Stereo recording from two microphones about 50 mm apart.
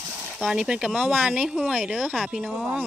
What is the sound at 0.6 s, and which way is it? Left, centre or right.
Speech, centre.